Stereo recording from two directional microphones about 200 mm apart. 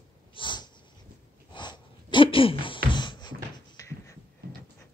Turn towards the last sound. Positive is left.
turn(degrees=15)  # may be behind; listen again after turning